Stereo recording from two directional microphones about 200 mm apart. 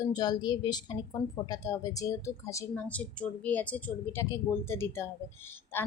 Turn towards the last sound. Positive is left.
turn(degrees=10)  # may be behind; listen again after turning